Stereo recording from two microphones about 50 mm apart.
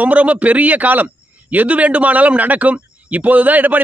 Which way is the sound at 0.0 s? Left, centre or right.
Right.